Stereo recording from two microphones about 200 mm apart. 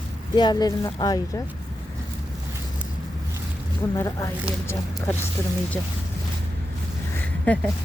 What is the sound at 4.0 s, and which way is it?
Speech, 15° left (ahead or behind).